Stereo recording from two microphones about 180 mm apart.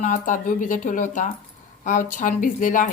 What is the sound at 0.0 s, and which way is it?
A woman's voice, 45° left (ahead or behind).